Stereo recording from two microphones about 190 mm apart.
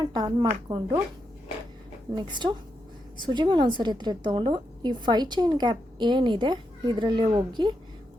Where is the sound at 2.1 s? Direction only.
25° right (ahead or behind).